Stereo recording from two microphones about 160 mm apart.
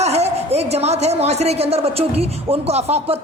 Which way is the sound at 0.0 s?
40° right (ahead or behind).